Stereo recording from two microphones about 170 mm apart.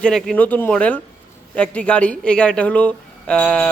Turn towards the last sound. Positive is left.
turn(degrees=5)  # may be behind; listen again after turning